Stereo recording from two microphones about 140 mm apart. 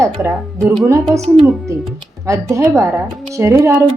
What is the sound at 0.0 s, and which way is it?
Speech, 20° right (ahead or behind).